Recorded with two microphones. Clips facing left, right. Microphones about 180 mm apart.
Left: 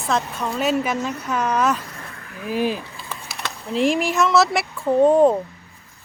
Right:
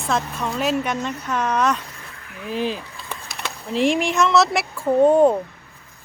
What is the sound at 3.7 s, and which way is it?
Speech, centre (ahead or behind).